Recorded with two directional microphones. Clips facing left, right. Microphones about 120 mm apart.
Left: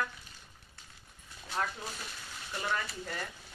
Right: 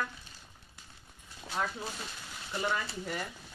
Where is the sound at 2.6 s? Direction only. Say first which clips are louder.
Right 2 dB; 10° right (ahead or behind).